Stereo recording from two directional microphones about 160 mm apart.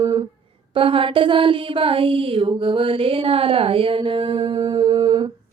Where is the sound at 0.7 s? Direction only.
35° right (ahead or behind).